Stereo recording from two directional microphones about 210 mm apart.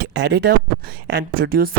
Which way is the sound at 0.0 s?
55° right (ahead or behind).